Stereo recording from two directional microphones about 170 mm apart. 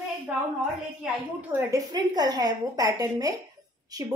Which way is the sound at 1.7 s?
25° right (ahead or behind).